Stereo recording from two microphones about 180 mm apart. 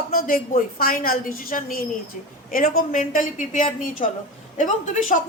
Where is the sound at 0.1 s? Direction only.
55° left (ahead or behind).